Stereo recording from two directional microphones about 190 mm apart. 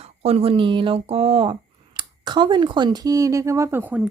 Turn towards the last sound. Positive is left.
turn(degrees=-10)  # may be behind; listen again after turning